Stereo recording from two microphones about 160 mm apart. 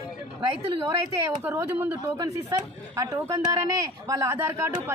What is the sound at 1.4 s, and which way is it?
Speech, 10° right (ahead or behind).